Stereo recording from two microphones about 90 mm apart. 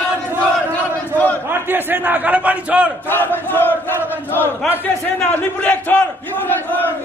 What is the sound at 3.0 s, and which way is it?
Battle cry, 20° left (ahead or behind).